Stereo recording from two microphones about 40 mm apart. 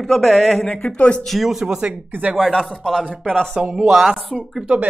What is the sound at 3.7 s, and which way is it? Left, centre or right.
Speech, centre.